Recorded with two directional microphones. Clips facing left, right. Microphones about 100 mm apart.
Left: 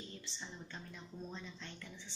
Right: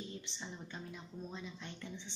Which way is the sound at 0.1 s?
20° right (ahead or behind).